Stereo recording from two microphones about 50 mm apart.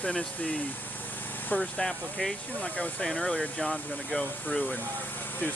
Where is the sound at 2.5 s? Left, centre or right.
Left.